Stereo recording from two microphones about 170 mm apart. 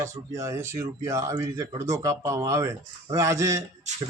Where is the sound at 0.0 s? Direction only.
15° right (ahead or behind).